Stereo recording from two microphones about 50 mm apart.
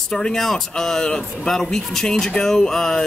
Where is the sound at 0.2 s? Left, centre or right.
Centre.